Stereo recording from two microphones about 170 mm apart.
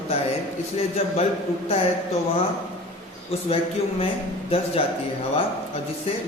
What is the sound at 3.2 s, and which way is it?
Speech, 35° left (ahead or behind).